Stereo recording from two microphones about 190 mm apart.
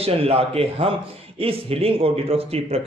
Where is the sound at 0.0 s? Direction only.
30° right (ahead or behind).